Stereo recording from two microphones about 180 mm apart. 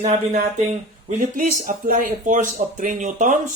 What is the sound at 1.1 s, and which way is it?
Speech, 45° right (ahead or behind).